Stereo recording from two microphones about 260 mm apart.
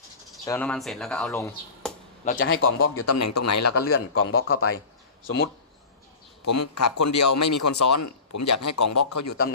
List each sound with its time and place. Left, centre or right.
0.4 s speech: centre
2.2 s a man's voice: left
2.7 s a man's voice: left
3.8 s a man's voice: left
6.4 s a man's voice: left